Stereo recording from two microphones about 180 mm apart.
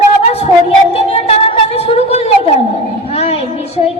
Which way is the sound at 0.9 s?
35° left (ahead or behind).